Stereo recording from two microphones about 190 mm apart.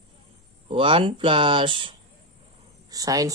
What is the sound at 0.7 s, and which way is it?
Speech, 25° right (ahead or behind).